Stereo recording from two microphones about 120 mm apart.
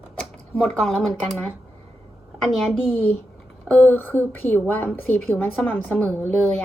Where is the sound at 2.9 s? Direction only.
15° left (ahead or behind).